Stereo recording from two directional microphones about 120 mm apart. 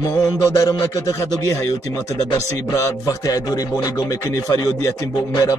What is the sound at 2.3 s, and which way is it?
A man's voice, 25° left (ahead or behind).